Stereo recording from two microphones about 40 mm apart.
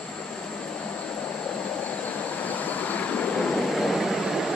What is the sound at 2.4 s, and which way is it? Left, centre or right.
Vehicle, left.